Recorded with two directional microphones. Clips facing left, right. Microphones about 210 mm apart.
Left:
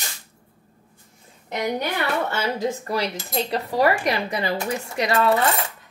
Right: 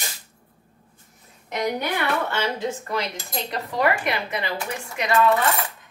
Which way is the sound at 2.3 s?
35° left (ahead or behind).